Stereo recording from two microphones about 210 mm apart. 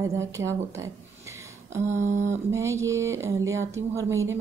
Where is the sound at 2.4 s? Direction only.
15° right (ahead or behind).